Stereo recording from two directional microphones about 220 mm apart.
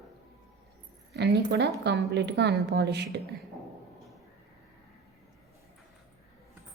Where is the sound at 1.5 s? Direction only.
50° right (ahead or behind).